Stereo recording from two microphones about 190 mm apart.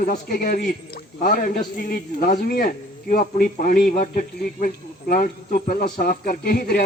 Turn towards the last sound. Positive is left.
turn(degrees=50)  # may be behind; listen again after turning